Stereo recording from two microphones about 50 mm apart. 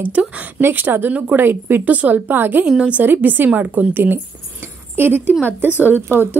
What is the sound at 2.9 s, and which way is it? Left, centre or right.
Speech, right.